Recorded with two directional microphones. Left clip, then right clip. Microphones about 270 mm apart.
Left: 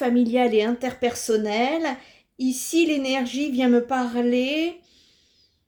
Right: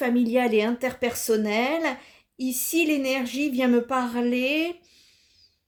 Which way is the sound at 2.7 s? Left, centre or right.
Right.